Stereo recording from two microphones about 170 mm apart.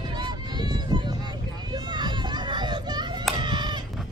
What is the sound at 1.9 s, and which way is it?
Children playing, 25° right (ahead or behind).